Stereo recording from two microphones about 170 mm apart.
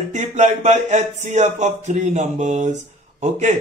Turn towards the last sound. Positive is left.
turn(degrees=-45)  # may be behind; listen again after turning